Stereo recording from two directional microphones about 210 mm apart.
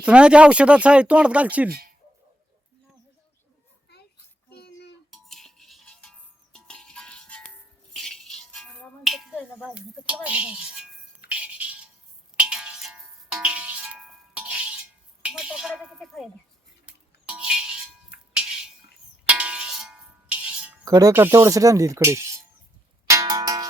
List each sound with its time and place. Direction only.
0.0 s speech: 5° right (ahead or behind)
5.1 s music: centre (ahead or behind)
10.2 s speech: 5° right (ahead or behind)
11.3 s music: 5° right (ahead or behind)
18.3 s a sound: 5° right (ahead or behind)
19.2 s music: 5° right (ahead or behind)
20.8 s speech: 15° right (ahead or behind)
23.0 s music: 15° right (ahead or behind)